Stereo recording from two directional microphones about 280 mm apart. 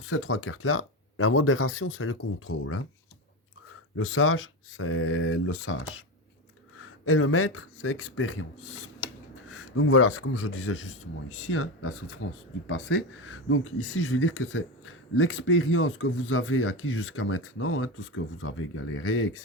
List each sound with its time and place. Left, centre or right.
0.1 s speech: left
3.9 s speech: left
9.0 s a sound: centre
9.5 s speech: left